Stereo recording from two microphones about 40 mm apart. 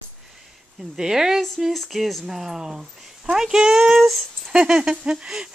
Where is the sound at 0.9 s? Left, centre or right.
Centre.